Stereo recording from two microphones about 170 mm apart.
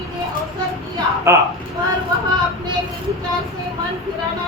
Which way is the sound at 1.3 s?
15° right (ahead or behind).